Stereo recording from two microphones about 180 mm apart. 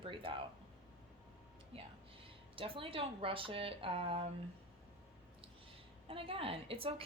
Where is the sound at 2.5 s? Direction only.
30° right (ahead or behind).